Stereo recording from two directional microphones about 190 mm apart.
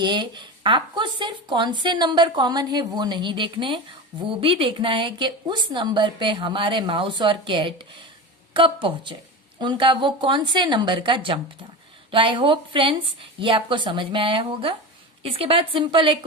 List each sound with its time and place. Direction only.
0.0 s speech: 25° right (ahead or behind)